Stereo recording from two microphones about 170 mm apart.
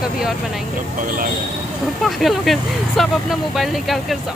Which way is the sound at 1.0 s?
55° right (ahead or behind).